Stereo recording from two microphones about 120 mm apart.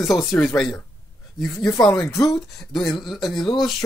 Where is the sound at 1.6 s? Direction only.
30° left (ahead or behind).